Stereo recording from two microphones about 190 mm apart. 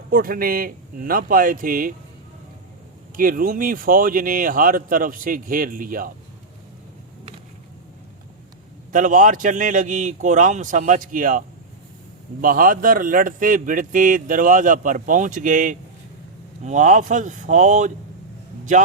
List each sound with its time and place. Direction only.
0.1 s speech: 50° right (ahead or behind)
3.2 s speech: 50° right (ahead or behind)
8.9 s speech: 45° right (ahead or behind)